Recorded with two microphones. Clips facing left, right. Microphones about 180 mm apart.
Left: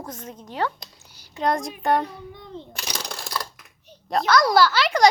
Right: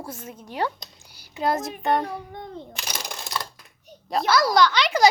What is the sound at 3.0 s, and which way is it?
Computer keyboard, 20° right (ahead or behind).